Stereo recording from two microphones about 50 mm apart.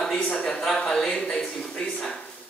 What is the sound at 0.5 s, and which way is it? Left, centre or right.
Speech, centre.